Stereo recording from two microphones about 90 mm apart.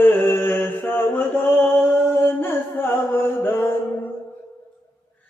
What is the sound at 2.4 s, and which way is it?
Music, 25° left (ahead or behind).